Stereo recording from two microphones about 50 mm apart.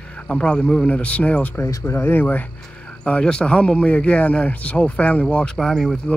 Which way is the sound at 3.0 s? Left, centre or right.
Left.